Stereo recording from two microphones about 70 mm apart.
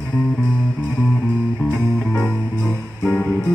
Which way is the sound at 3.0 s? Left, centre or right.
Centre.